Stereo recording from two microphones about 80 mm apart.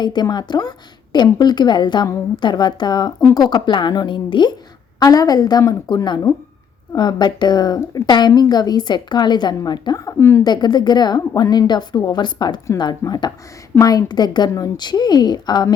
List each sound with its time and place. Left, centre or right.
0.0 s a woman's voice: left
3.7 s a woman's voice: left
4.9 s a woman's voice: left
6.9 s a woman's voice: left
10.2 s a woman's voice: left
10.4 s a woman's voice: left
13.7 s a woman's voice: left